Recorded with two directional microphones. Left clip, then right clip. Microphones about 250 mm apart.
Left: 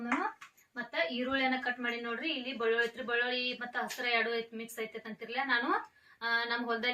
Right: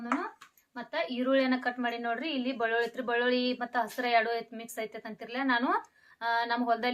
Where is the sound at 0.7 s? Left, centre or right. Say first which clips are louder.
Even; centre.